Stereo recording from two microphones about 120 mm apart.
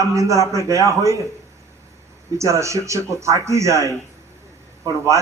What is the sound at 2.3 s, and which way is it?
A man's voice, 25° right (ahead or behind).